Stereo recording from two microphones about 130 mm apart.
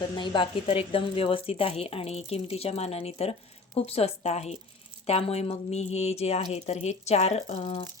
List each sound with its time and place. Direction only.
0.2 s a woman's voice: 45° left (ahead or behind)